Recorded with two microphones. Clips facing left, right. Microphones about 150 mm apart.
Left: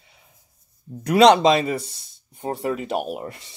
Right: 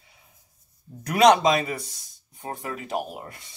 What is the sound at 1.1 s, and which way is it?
Speech, 25° left (ahead or behind).